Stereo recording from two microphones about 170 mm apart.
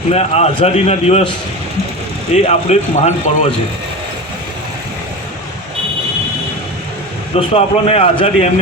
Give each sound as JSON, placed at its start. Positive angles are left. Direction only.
{"t": 0.1, "sound": "a man's voice", "side_deg": 40}
{"t": 2.3, "sound": "a man's voice", "side_deg": 40}
{"t": 7.3, "sound": "a man's voice", "side_deg": 35}